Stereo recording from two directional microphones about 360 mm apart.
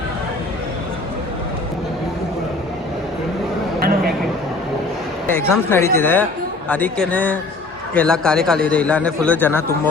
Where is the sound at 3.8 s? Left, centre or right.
Right.